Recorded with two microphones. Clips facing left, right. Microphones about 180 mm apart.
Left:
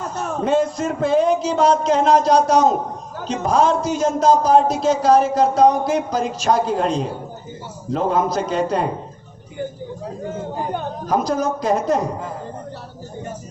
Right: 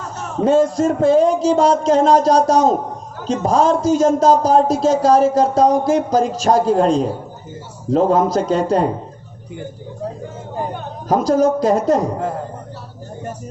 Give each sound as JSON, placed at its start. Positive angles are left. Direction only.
{"t": 0.4, "sound": "a man's voice", "side_deg": -40}
{"t": 11.1, "sound": "a man's voice", "side_deg": -40}